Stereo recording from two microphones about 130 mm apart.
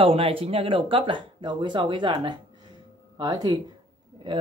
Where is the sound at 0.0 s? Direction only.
45° right (ahead or behind).